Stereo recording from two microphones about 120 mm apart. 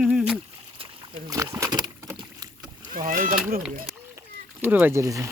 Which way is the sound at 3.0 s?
90° right.